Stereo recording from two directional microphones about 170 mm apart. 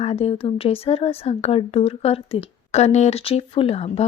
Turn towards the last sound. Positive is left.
turn(degrees=35)  # may be behind; listen again after turning